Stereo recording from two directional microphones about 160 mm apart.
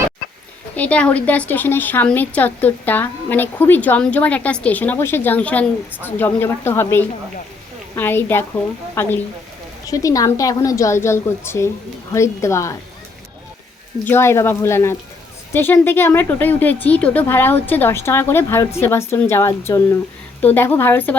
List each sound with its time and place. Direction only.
0.8 s a woman's voice: 10° left (ahead or behind)
14.0 s speech: 15° left (ahead or behind)